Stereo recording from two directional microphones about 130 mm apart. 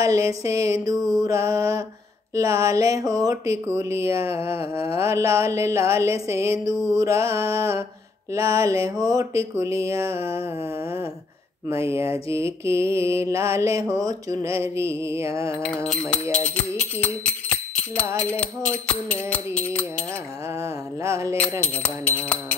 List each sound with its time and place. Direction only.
0.0 s mantra: 25° right (ahead or behind)
11.8 s mantra: 20° right (ahead or behind)
15.6 s music: 5° left (ahead or behind)
20.6 s mantra: 20° right (ahead or behind)
21.4 s music: 10° left (ahead or behind)